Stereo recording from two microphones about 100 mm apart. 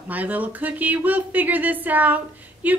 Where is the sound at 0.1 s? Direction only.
15° right (ahead or behind).